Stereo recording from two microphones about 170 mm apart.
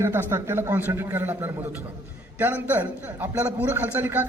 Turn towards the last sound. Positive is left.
turn(degrees=-10)  # may be behind; listen again after turning